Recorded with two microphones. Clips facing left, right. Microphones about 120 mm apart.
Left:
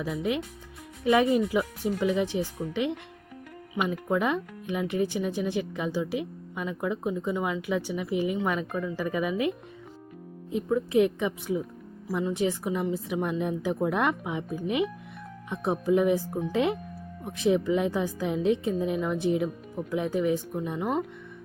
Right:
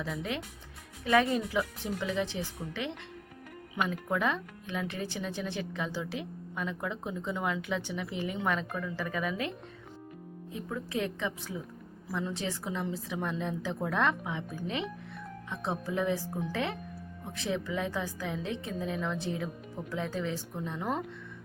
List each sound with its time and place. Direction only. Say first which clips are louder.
0.0 s speech: left 6 dB; 15° left (ahead or behind)
3.8 s speech: left 4 dB; 15° left (ahead or behind)